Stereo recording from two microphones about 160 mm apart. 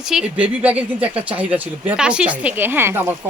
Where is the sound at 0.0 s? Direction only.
5° right (ahead or behind).